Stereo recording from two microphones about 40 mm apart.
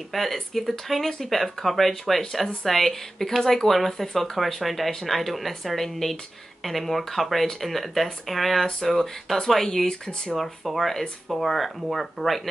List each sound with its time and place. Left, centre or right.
0.1 s speech: centre
9.8 s speech: centre
10.3 s speech: centre